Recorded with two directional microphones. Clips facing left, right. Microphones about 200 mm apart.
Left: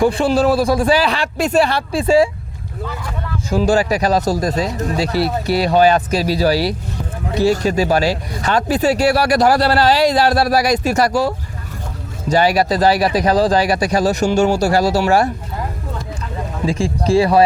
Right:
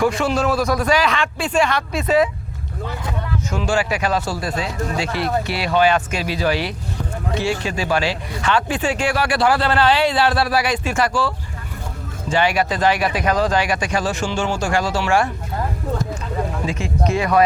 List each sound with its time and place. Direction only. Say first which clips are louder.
0.0 s speech: left 4 dB; 30° left (ahead or behind)
3.5 s speech: left 7 dB; 35° left (ahead or behind)
16.6 s speech: left 9 dB; 30° left (ahead or behind)